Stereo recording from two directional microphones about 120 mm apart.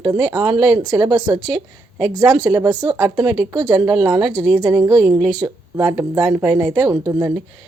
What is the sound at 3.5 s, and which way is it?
Speech, 35° right (ahead or behind).